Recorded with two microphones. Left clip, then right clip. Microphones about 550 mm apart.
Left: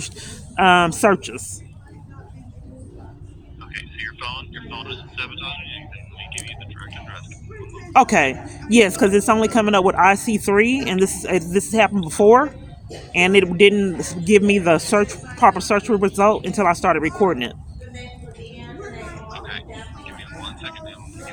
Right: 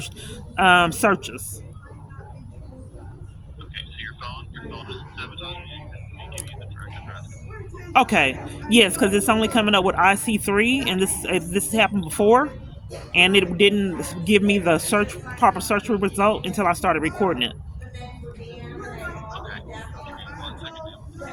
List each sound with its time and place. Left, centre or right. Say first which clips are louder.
0.0 s speech: left 2 dB; right
3.7 s vehicle: left 3 dB; centre
4.2 s vehicle: left 6 dB; right
7.9 s speech: left 3 dB; right